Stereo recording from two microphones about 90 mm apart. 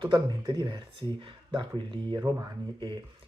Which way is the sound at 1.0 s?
70° right (ahead or behind).